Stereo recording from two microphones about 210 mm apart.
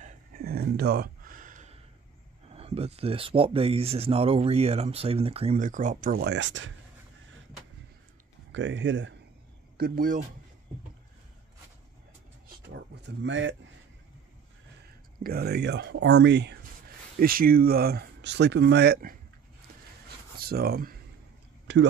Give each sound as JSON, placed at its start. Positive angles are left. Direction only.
{"t": 0.0, "sound": "a sound", "side_deg": -45}
{"t": 2.5, "sound": "speech", "side_deg": -30}
{"t": 8.5, "sound": "speech", "side_deg": -60}
{"t": 9.8, "sound": "speech", "side_deg": -45}
{"t": 13.0, "sound": "speech", "side_deg": -60}
{"t": 15.2, "sound": "speech", "side_deg": -50}
{"t": 17.2, "sound": "speech", "side_deg": -45}
{"t": 20.3, "sound": "speech", "side_deg": -45}
{"t": 21.7, "sound": "speech", "side_deg": -60}